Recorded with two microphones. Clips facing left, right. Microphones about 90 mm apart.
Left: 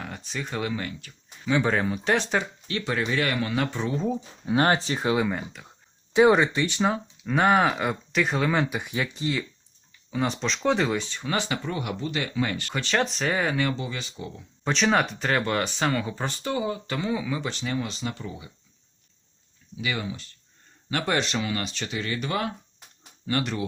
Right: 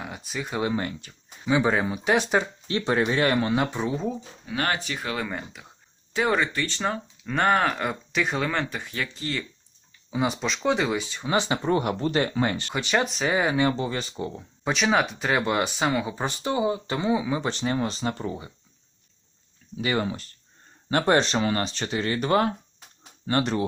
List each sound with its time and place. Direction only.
0.0 s speech: 10° right (ahead or behind)
0.6 s speech: 30° right (ahead or behind)
1.5 s speech: 15° right (ahead or behind)
2.3 s speech: 20° right (ahead or behind)
4.4 s speech: 30° left (ahead or behind)
5.1 s speech: 5° left (ahead or behind)
6.1 s speech: 20° left (ahead or behind)
10.1 s speech: 10° right (ahead or behind)
11.3 s speech: 25° right (ahead or behind)
11.7 s speech: 40° right (ahead or behind); by 13.7 s 15° right (ahead or behind)
13.7 s speech: 35° right (ahead or behind)
14.6 s speech: 5° right (ahead or behind); by 18.5 s 40° right (ahead or behind)
19.7 s speech: 40° right (ahead or behind)